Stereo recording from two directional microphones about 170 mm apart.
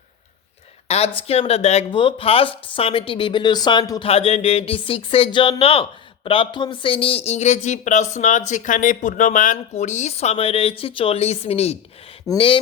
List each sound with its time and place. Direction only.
0.9 s speech: 40° left (ahead or behind)
4.0 s speech: 35° left (ahead or behind)
12.3 s speech: centre (ahead or behind)